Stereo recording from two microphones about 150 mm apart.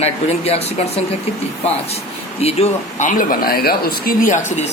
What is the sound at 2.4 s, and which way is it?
Speech, 45° left (ahead or behind).